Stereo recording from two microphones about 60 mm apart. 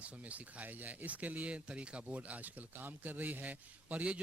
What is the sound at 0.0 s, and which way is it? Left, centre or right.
Speech, right.